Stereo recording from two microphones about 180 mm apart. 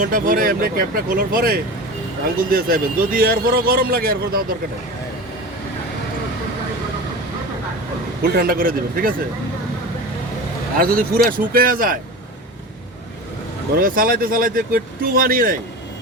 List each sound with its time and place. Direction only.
0.0 s a man's voice: 50° right (ahead or behind)
8.2 s speech: 55° right (ahead or behind)
10.8 s speech: 55° right (ahead or behind)
13.7 s speech: 50° right (ahead or behind)